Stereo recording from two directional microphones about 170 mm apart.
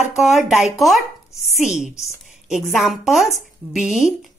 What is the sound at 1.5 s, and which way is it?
A woman's voice, 5° right (ahead or behind).